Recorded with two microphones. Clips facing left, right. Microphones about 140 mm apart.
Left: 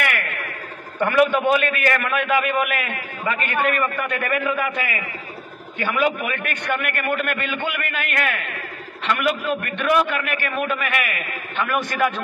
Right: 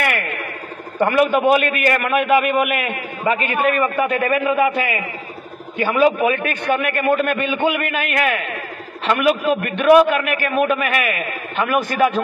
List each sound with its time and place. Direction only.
0.0 s a sound: 25° right (ahead or behind)
1.0 s a man's voice: 25° right (ahead or behind)
9.6 s a man's voice: 20° right (ahead or behind)